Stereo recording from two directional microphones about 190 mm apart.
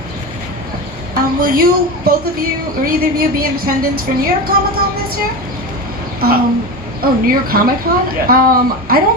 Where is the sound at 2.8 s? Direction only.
50° right (ahead or behind).